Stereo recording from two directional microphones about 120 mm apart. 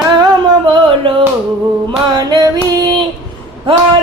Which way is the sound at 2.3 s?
30° right (ahead or behind).